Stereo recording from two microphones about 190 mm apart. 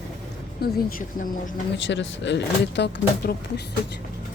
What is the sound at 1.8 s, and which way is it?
Speech, 70° left (ahead or behind).